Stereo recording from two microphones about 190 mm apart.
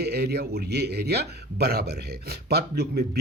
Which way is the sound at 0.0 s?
60° right (ahead or behind).